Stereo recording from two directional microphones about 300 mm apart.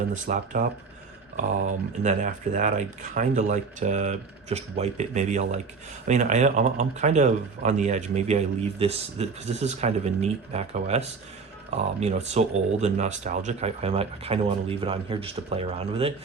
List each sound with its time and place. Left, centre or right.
0.1 s speech: right